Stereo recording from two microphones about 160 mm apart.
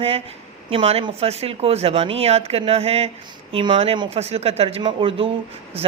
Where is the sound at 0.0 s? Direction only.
35° right (ahead or behind).